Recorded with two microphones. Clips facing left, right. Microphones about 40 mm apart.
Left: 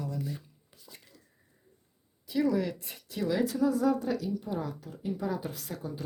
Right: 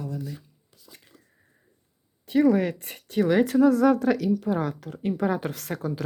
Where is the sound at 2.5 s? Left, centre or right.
Right.